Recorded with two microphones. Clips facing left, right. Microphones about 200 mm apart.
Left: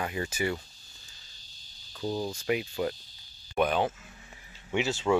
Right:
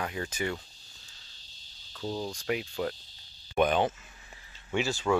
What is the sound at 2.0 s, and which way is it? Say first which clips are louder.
Cricket: left 2 dB; 10° left (ahead or behind).